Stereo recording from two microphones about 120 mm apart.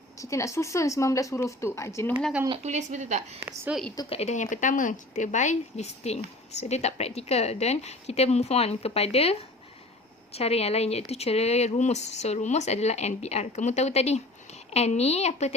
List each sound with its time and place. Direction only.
0.2 s speech: 25° left (ahead or behind)
2.6 s speech: 80° right
3.4 s a woman's voice: 10° right (ahead or behind)
4.1 s a woman's voice: 65° left (ahead or behind)